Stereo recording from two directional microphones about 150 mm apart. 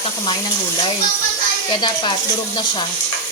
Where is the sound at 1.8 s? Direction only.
30° left (ahead or behind).